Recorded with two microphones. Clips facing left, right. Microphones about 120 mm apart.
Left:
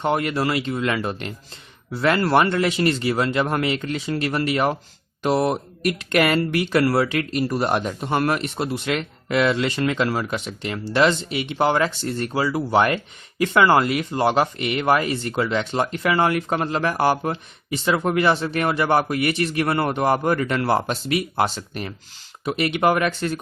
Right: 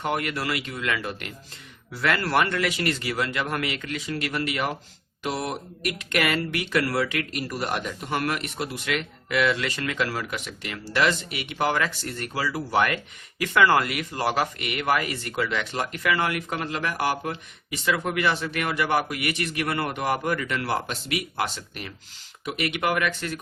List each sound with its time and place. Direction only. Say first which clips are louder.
0.0 s speech: left 6 dB; 30° left (ahead or behind)